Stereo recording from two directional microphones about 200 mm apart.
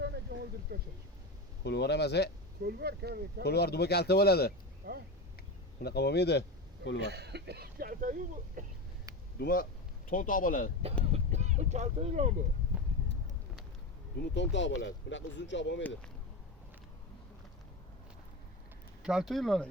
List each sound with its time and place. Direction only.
0.0 s a sound: 55° right (ahead or behind)
1.6 s speech: 55° left (ahead or behind)
2.6 s speech: 55° right (ahead or behind)
3.4 s speech: 55° left (ahead or behind)
4.8 s speech: 45° right (ahead or behind)
5.8 s speech: 55° left (ahead or behind)
7.0 s speech: 55° right (ahead or behind)
9.4 s speech: 50° left (ahead or behind)
11.1 s speech: 35° right (ahead or behind)
14.2 s speech: 65° left (ahead or behind)
19.0 s speech: centre (ahead or behind)